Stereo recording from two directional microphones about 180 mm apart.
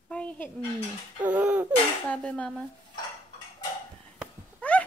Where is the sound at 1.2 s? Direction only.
5° right (ahead or behind).